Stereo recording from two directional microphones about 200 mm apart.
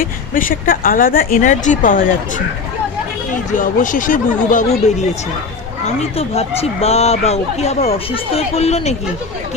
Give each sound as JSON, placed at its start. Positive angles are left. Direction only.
{"t": 0.0, "sound": "speech", "side_deg": 45}
{"t": 3.5, "sound": "speech", "side_deg": 40}